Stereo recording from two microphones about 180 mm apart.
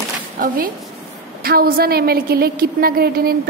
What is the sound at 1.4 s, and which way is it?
A woman's voice, 55° right (ahead or behind).